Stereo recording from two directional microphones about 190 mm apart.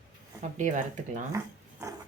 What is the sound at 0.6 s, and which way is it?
Speech, 40° right (ahead or behind).